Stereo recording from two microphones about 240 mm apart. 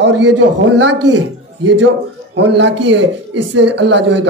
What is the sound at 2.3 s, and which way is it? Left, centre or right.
Speech, right.